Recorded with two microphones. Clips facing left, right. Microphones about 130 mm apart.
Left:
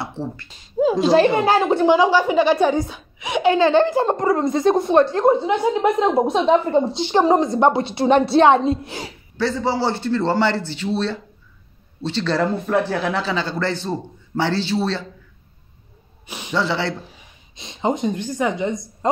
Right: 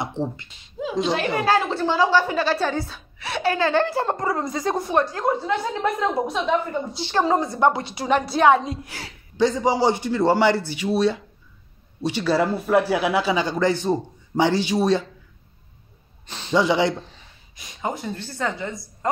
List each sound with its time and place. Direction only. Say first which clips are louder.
0.0 s speech: right 1 dB; 20° right (ahead or behind)
1.0 s a woman's voice: left 6 dB; 30° left (ahead or behind)
9.4 s speech: right 2 dB; 15° right (ahead or behind)
16.3 s a sound: left 3 dB; 10° left (ahead or behind)
16.5 s speech: right 3 dB; 15° right (ahead or behind)
17.6 s a woman's voice: left 7 dB; 25° left (ahead or behind)